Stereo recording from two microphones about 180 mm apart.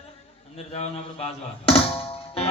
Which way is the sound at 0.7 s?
35° left (ahead or behind).